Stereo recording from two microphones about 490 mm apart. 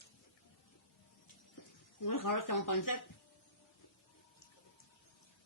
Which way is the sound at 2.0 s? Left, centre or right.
Left.